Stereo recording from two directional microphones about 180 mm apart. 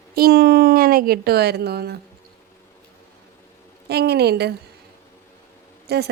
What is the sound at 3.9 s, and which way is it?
Speech, 65° right (ahead or behind).